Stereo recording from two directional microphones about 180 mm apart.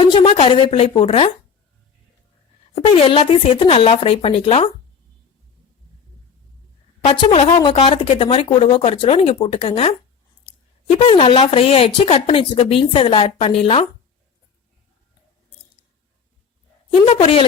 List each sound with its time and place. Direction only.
0.0 s a woman's voice: 30° left (ahead or behind)
2.7 s speech: 30° left (ahead or behind)
7.0 s speech: 35° left (ahead or behind)
10.9 s speech: 30° left (ahead or behind)
16.9 s speech: 30° left (ahead or behind)